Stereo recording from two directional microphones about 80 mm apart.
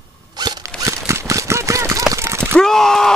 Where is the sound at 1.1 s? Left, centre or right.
Right.